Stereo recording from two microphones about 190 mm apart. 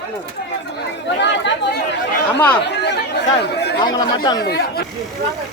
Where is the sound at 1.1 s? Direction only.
65° left (ahead or behind).